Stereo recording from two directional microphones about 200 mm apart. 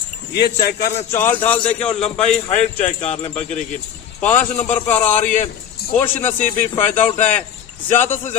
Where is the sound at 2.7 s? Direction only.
35° left (ahead or behind).